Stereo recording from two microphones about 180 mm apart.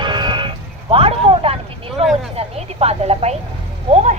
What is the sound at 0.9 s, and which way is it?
Speech, 30° right (ahead or behind).